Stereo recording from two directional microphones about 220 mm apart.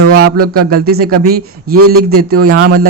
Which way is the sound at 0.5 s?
45° right (ahead or behind).